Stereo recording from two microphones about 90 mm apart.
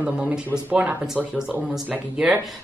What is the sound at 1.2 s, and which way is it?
Speech, 5° left (ahead or behind).